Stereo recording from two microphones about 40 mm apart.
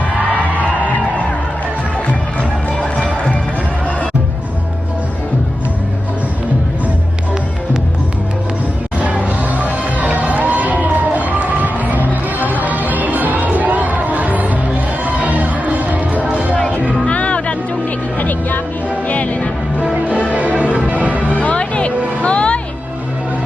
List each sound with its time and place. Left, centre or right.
0.2 s music: right
9.0 s music: right
17.1 s music: left
18.2 s music: left
19.9 s music: right
21.3 s music: left